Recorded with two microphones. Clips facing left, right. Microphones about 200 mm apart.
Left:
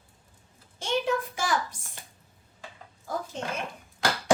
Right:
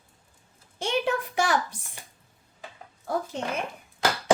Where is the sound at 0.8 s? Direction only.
65° right (ahead or behind).